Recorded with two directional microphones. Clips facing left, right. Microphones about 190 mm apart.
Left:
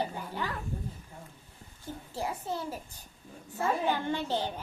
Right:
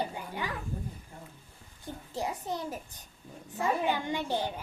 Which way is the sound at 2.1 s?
15° right (ahead or behind).